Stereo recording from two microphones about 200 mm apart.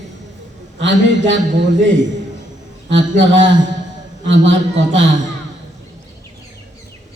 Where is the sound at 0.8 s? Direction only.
65° right (ahead or behind).